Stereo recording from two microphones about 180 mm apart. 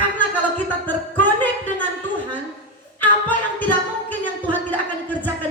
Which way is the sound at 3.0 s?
10° left (ahead or behind).